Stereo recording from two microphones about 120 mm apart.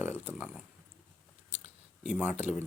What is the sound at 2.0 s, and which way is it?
Speech, 10° right (ahead or behind).